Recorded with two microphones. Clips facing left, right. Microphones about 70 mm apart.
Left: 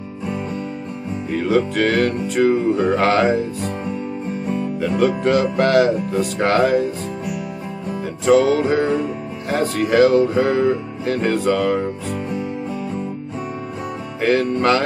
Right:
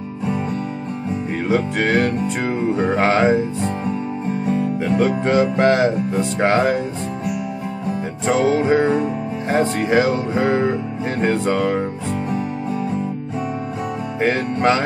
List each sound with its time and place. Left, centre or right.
1.5 s music: right
4.8 s music: right
8.3 s music: right
14.2 s music: right